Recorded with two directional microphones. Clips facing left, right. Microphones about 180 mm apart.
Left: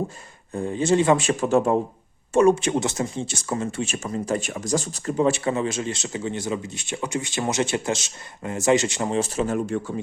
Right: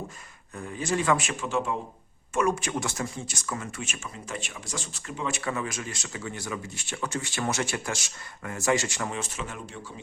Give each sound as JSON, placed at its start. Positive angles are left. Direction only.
{"t": 0.5, "sound": "speech", "side_deg": 30}
{"t": 2.3, "sound": "speech", "side_deg": 30}